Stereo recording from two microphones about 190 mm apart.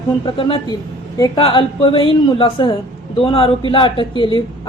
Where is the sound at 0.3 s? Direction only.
30° left (ahead or behind).